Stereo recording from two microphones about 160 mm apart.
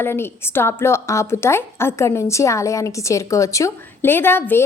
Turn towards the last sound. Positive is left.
turn(degrees=15)  # may be behind; listen again after turning